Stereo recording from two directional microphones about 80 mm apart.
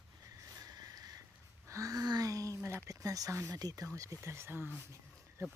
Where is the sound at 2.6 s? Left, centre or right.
Right.